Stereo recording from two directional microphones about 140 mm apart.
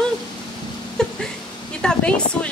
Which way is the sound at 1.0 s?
5° left (ahead or behind).